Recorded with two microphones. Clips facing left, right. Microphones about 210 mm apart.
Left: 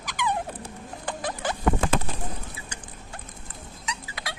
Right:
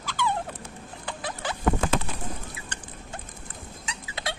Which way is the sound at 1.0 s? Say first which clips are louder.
Left 3 dB; 45° left (ahead or behind).